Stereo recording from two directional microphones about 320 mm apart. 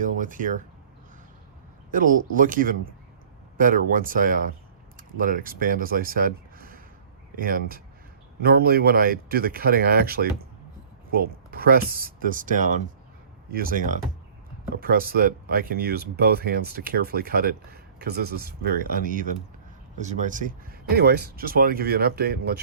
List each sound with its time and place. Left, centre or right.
0.0 s speech: right
1.9 s speech: right